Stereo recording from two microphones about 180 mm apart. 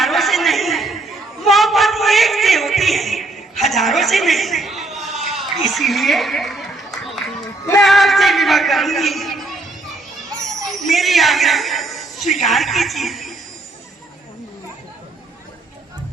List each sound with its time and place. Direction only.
0.0 s a sound: centre (ahead or behind)
5.1 s chatter: centre (ahead or behind)
7.8 s a man's voice: centre (ahead or behind)